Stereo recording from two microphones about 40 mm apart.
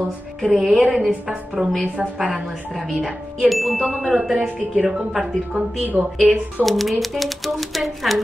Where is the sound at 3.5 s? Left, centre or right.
Centre.